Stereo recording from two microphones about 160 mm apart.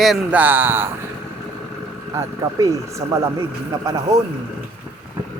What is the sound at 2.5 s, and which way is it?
Speech, 20° right (ahead or behind).